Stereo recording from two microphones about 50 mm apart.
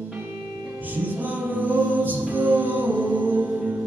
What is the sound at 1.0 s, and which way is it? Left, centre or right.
Music, right.